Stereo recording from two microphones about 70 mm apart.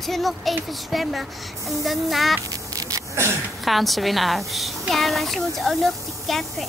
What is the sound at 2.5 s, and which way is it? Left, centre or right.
Duck, right.